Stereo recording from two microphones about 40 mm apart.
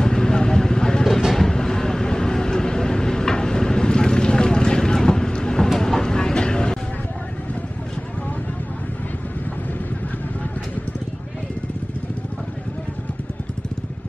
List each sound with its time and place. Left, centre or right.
0.0 s vehicle: centre